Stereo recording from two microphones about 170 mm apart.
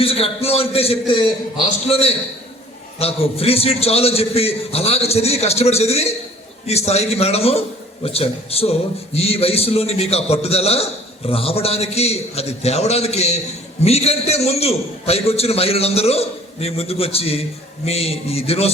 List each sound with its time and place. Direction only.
0.0 s a man's voice: 35° left (ahead or behind)